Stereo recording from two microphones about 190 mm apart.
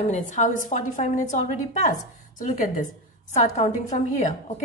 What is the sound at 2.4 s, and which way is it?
A woman's voice, 45° left (ahead or behind).